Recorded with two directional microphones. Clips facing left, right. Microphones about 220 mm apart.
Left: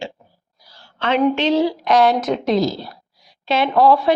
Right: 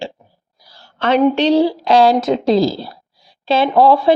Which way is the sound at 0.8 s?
40° right (ahead or behind).